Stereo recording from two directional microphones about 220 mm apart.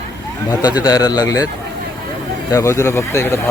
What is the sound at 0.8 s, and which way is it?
Speech, 15° left (ahead or behind).